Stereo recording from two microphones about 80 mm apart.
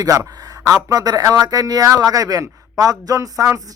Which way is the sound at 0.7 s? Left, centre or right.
Right.